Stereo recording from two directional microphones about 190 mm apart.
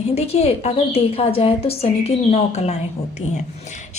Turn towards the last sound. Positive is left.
turn(degrees=40)  # may be behind; listen again after turning